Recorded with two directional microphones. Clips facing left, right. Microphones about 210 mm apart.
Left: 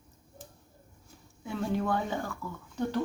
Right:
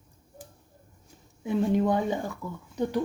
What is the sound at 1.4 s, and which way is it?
Speech, 20° right (ahead or behind).